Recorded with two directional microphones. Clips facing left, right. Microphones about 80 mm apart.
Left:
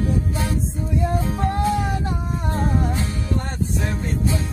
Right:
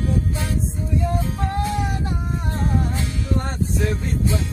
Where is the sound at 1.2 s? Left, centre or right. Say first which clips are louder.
Left 2 dB; left.